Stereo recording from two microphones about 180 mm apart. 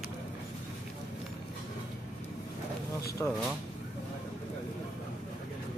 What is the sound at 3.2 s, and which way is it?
Speech, 10° left (ahead or behind).